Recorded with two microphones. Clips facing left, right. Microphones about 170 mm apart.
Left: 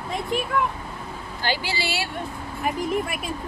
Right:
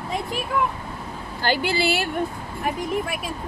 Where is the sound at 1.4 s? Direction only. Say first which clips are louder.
Right 5 dB; 50° right (ahead or behind).